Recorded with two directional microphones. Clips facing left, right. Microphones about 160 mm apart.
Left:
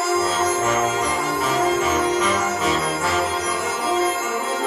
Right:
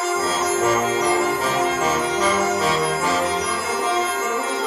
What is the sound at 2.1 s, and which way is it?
Jingle bell, 35° right (ahead or behind).